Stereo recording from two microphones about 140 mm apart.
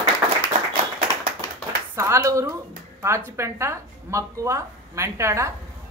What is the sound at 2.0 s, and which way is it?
Speech, 20° right (ahead or behind).